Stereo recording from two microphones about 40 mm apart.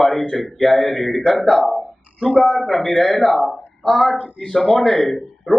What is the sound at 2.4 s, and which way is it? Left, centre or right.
A man's voice, centre.